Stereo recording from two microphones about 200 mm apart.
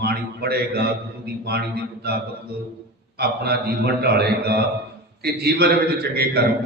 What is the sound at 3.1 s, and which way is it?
A man's voice, 55° right (ahead or behind).